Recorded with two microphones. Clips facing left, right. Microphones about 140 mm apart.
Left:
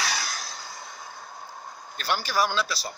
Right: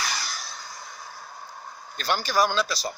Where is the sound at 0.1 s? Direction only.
90° left.